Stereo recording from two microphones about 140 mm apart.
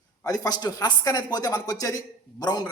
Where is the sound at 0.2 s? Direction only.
25° left (ahead or behind).